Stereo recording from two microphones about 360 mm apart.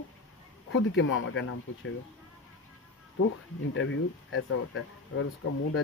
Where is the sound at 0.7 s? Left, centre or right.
Left.